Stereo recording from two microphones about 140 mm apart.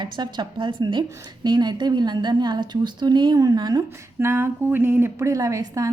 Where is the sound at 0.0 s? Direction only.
35° right (ahead or behind).